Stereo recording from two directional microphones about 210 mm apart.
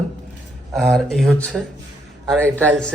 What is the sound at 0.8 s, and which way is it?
A man's voice, centre (ahead or behind).